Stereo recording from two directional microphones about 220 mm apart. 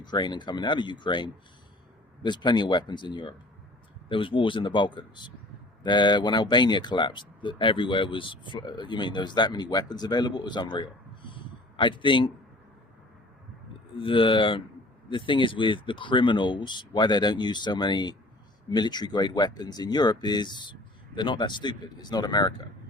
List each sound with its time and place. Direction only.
0.0 s speech: 20° left (ahead or behind)
13.9 s speech: 25° left (ahead or behind)